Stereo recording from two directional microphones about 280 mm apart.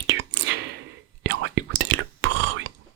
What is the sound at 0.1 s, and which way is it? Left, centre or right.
Whispering, right.